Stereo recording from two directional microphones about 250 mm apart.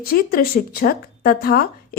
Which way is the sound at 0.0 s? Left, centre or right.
Left.